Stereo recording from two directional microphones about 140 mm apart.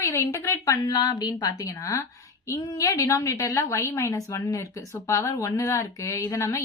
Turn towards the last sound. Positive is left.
turn(degrees=20)  # may be behind; listen again after turning